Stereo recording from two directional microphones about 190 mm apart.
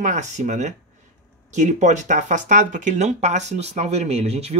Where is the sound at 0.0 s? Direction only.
40° right (ahead or behind).